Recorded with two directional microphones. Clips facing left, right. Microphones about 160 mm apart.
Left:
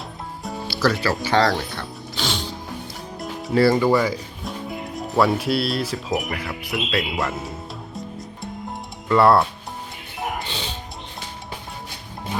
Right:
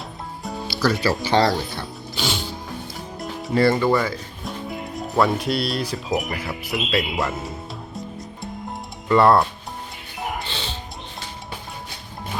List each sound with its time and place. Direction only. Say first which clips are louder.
0.4 s music: left 1 dB; centre (ahead or behind)
1.2 s speech: even; 20° right (ahead or behind)
1.7 s music: even; 5° right (ahead or behind)
3.2 s speech: left 1 dB; centre (ahead or behind)
4.4 s speech: even; centre (ahead or behind)
7.9 s music: even; centre (ahead or behind)